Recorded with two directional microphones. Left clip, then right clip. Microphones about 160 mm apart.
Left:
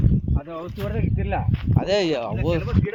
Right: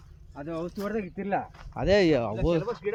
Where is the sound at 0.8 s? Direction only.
20° left (ahead or behind).